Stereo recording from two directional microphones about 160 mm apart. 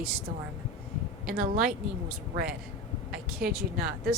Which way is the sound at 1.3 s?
70° right (ahead or behind).